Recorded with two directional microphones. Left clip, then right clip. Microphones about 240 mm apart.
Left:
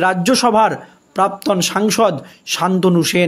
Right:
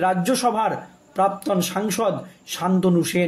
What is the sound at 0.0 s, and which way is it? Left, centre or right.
Speech, left.